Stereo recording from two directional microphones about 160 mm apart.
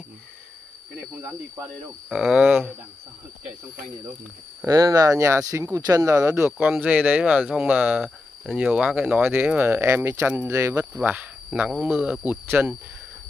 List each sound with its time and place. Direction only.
2.0 s speech: 5° right (ahead or behind)
4.6 s speech: 20° right (ahead or behind)